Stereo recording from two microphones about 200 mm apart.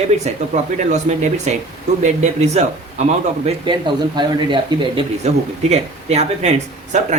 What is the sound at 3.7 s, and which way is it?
Speech, 25° right (ahead or behind).